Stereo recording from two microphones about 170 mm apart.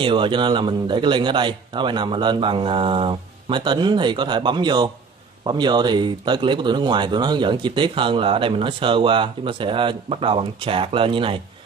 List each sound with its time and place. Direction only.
0.0 s speech: 30° right (ahead or behind)